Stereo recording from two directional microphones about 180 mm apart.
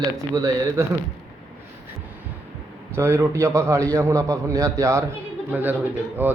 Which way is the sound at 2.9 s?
15° right (ahead or behind).